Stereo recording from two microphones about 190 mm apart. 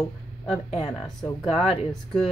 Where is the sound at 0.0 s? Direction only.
30° left (ahead or behind).